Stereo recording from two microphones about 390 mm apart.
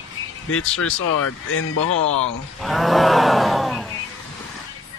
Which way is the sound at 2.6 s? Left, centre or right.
Centre.